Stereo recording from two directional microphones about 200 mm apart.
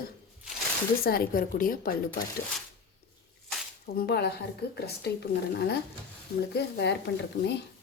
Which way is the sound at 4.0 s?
55° left (ahead or behind).